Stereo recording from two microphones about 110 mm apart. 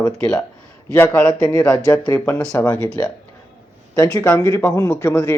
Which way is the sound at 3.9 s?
25° left (ahead or behind).